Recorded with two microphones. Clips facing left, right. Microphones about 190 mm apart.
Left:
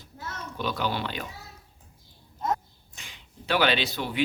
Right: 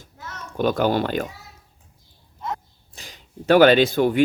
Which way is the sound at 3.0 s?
40° right (ahead or behind).